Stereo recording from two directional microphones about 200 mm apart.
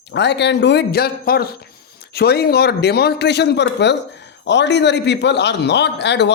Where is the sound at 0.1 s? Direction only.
60° left (ahead or behind).